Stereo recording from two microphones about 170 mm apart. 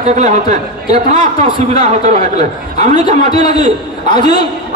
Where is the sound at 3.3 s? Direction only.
25° left (ahead or behind).